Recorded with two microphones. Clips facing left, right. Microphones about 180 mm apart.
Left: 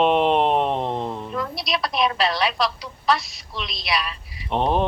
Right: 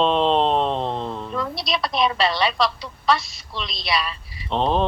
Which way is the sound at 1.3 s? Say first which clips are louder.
Right 2 dB; centre (ahead or behind).